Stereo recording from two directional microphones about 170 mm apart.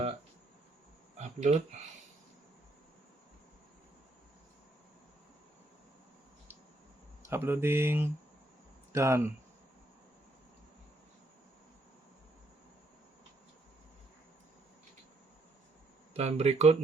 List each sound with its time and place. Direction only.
1.2 s speech: 40° right (ahead or behind)
7.3 s speech: 15° right (ahead or behind)
16.1 s speech: 40° right (ahead or behind)